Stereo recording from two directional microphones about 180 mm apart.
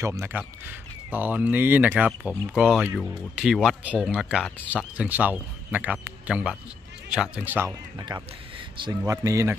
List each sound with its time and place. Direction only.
0.0 s speech: 15° right (ahead or behind)
8.7 s speech: 25° right (ahead or behind)